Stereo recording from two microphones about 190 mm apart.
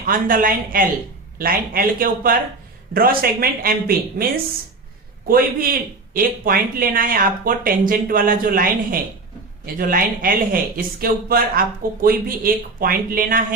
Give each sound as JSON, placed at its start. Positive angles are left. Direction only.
{"t": 0.0, "sound": "speech", "side_deg": -45}
{"t": 5.3, "sound": "speech", "side_deg": -50}